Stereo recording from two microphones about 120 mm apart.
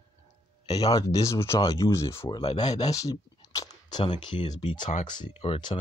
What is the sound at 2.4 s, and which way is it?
Speech, 40° left (ahead or behind).